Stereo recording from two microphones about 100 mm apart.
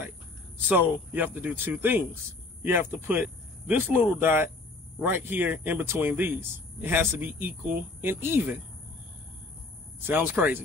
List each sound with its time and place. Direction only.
0.6 s a man's voice: 20° right (ahead or behind)
10.0 s a man's voice: 20° right (ahead or behind)